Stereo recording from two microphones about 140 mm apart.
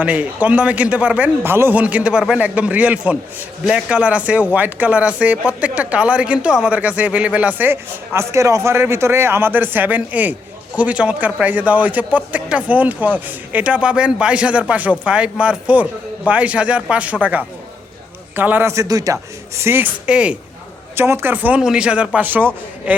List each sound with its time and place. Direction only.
0.0 s speech: 10° right (ahead or behind)